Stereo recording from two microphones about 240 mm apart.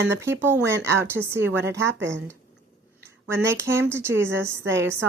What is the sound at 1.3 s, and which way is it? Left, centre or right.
Speech, right.